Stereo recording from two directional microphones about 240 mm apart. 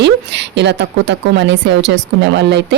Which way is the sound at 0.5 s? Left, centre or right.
Right.